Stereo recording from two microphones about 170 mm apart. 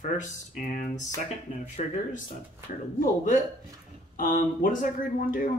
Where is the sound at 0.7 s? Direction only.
45° left (ahead or behind).